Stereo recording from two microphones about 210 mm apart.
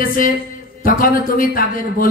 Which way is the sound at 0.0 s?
40° left (ahead or behind).